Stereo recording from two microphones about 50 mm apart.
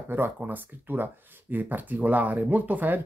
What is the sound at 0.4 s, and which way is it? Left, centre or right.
Speech, right.